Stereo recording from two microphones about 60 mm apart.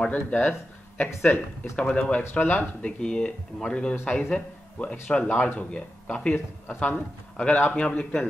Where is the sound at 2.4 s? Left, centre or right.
Left.